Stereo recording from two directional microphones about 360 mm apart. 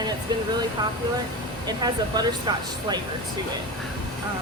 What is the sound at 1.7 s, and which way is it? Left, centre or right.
Speech, centre.